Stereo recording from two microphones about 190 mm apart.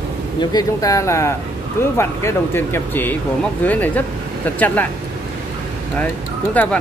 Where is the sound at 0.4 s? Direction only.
20° left (ahead or behind).